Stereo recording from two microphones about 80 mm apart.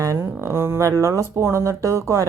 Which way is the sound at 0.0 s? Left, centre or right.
Right.